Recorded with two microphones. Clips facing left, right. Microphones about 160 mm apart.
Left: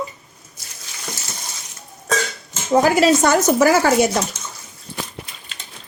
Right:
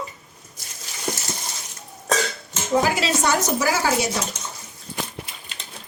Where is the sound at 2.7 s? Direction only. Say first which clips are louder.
Left 7 dB; 50° left (ahead or behind).